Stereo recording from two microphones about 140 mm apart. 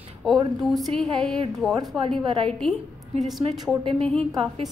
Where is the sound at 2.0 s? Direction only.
45° right (ahead or behind).